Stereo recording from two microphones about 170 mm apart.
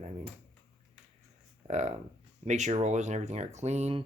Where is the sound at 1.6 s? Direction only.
40° right (ahead or behind).